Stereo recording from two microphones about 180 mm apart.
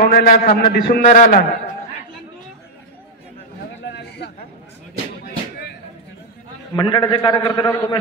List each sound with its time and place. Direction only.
0.0 s a man's voice: 55° left (ahead or behind)
1.0 s a man's voice: 45° left (ahead or behind)
3.8 s a sound: 70° left (ahead or behind)
5.2 s music: 60° left (ahead or behind)
6.7 s a man's voice: 25° left (ahead or behind)